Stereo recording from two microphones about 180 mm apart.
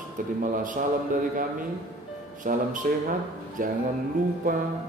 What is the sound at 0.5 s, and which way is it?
Speech, 50° right (ahead or behind).